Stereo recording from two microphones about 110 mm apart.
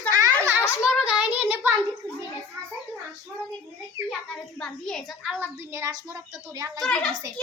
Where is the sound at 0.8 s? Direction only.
10° right (ahead or behind).